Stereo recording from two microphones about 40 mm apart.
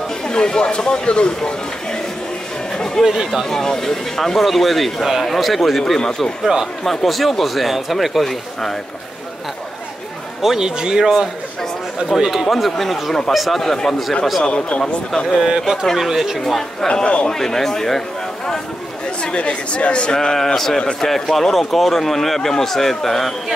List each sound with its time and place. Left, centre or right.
0.3 s speech: left
3.0 s a man's voice: centre
3.4 s a man's voice: centre
5.3 s a man's voice: centre
6.4 s speech: centre
6.8 s a man's voice: centre
10.4 s speech: centre
12.4 s a man's voice: centre
14.4 s speech: left
16.0 s a man's voice: centre
16.8 s speech: left
17.3 s a man's voice: centre
19.2 s speech: left
20.2 s a man's voice: centre